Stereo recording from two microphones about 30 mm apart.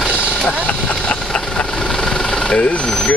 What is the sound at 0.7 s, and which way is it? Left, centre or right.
Vehicle, left.